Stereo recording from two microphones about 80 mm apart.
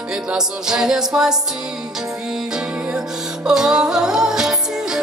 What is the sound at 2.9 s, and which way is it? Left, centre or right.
Music, centre.